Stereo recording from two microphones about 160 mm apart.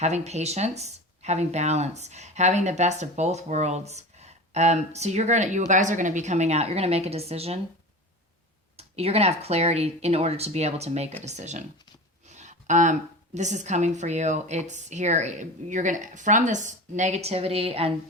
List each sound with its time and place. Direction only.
0.0 s speech: 45° right (ahead or behind)
8.7 s speech: 40° right (ahead or behind)